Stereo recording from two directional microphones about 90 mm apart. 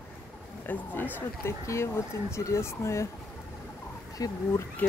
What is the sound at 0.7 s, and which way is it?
Speech, 20° left (ahead or behind).